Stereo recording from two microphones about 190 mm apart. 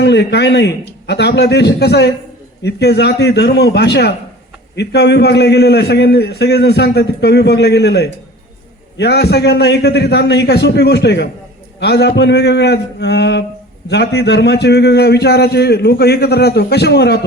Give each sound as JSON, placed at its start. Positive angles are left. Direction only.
{"t": 0.0, "sound": "a man's voice", "side_deg": 65}